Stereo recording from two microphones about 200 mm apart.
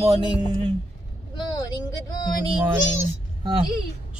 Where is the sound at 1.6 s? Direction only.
20° left (ahead or behind).